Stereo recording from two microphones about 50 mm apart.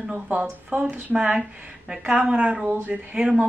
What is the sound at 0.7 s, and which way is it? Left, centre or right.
Speech, right.